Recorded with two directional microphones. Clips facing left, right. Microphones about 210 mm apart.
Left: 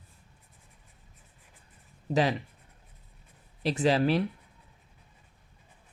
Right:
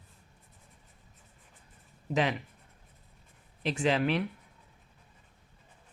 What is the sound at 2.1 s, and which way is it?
Speech, 35° left (ahead or behind).